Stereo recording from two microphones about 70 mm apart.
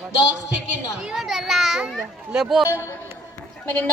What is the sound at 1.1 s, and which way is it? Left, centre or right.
Speech, centre.